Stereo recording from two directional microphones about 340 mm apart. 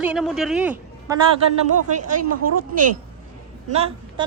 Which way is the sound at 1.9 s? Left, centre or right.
Right.